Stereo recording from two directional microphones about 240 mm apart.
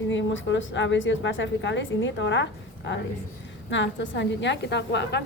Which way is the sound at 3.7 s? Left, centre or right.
Left.